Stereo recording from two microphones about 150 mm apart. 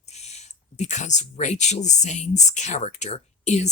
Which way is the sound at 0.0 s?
50° left (ahead or behind).